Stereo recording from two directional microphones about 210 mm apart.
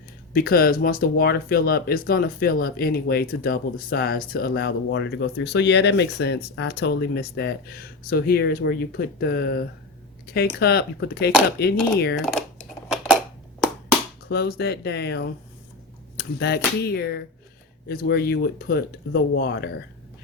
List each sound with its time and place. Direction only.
0.3 s speech: 45° left (ahead or behind)
14.3 s speech: 45° left (ahead or behind)